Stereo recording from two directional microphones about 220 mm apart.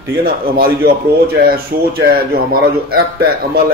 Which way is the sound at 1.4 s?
45° right (ahead or behind).